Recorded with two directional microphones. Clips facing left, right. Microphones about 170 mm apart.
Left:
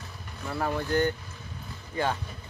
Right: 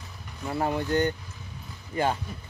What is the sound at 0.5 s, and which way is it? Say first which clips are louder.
Speech: right 2 dB; 20° right (ahead or behind).